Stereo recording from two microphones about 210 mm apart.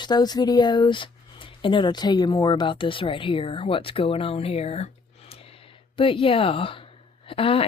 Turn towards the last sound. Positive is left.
turn(degrees=25)  # may be behind; listen again after turning